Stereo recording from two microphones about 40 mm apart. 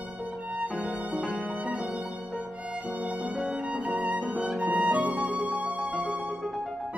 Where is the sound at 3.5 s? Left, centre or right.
Right.